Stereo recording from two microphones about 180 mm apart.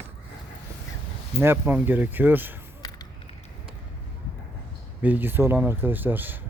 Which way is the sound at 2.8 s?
20° left (ahead or behind).